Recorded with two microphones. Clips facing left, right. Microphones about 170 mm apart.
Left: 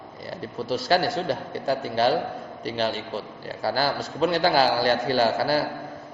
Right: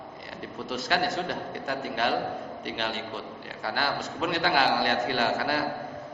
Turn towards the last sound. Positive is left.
turn(degrees=35)  # may be behind; listen again after turning